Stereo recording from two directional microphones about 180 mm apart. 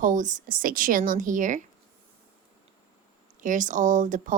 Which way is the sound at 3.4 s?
45° right (ahead or behind).